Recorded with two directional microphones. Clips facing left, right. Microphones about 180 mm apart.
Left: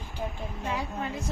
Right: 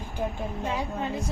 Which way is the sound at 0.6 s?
20° right (ahead or behind).